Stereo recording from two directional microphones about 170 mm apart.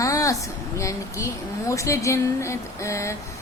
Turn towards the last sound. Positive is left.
turn(degrees=15)  # may be behind; listen again after turning